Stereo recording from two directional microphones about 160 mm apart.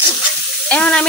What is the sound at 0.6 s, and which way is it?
Frying, 10° left (ahead or behind).